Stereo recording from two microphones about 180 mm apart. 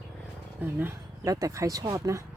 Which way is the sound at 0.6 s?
10° right (ahead or behind).